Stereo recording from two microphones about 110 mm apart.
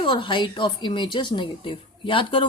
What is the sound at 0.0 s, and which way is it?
A woman's voice, 50° left (ahead or behind).